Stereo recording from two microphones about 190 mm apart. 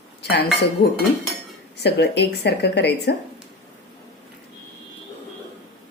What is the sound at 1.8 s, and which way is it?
Speech, 60° left (ahead or behind).